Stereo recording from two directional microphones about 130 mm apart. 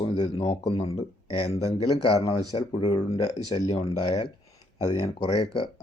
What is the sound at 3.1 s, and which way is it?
Speech, 55° left (ahead or behind).